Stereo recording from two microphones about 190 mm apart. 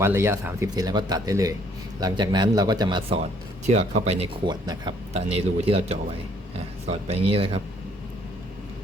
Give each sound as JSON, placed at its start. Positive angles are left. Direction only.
{"t": 0.0, "sound": "speech", "side_deg": -15}
{"t": 3.7, "sound": "speech", "side_deg": -35}
{"t": 4.6, "sound": "speech", "side_deg": -20}
{"t": 5.1, "sound": "speech", "side_deg": -35}